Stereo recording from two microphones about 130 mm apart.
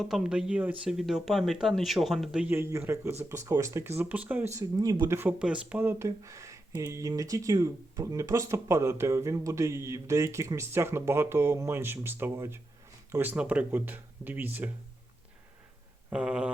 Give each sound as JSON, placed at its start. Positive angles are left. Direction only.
{"t": 0.0, "sound": "speech", "side_deg": -5}
{"t": 2.5, "sound": "speech", "side_deg": -20}
{"t": 5.4, "sound": "speech", "side_deg": -5}
{"t": 16.0, "sound": "a sound", "side_deg": -10}